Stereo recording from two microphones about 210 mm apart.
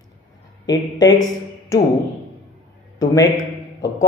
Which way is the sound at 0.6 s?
20° left (ahead or behind).